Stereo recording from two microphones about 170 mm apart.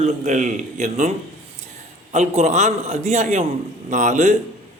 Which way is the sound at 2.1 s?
45° right (ahead or behind).